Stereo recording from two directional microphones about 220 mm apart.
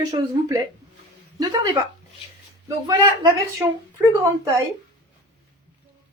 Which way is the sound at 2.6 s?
15° right (ahead or behind).